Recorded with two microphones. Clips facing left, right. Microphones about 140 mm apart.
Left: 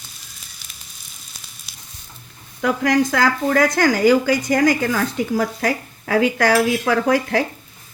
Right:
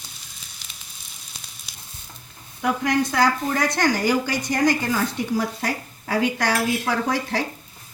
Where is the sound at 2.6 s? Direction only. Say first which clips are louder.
Left 4 dB; 90° left.